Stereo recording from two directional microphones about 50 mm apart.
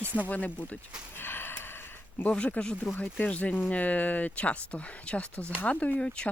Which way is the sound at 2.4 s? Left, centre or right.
Left.